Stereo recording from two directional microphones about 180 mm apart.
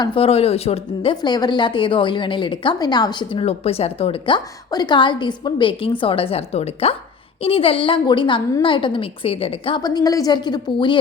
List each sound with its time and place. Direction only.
0.0 s speech: 30° left (ahead or behind)
1.1 s a woman's voice: 25° left (ahead or behind)